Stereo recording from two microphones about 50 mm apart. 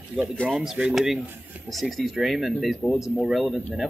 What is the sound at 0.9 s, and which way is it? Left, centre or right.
A man's voice, centre.